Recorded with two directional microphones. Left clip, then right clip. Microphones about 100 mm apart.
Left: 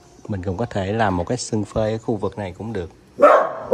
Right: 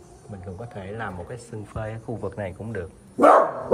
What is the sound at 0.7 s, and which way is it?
Speech, 90° left.